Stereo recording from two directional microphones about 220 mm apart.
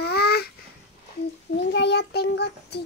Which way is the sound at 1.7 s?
50° left (ahead or behind).